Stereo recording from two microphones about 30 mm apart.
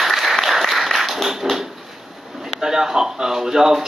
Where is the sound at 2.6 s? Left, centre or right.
Centre.